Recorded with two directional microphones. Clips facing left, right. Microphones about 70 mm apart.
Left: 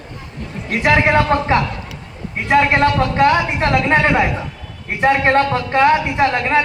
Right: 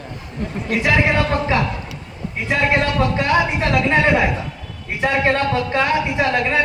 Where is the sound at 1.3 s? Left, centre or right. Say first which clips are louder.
Left 3 dB; left.